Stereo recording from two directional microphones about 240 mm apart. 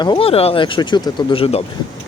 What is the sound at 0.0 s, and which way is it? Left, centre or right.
Speech, left.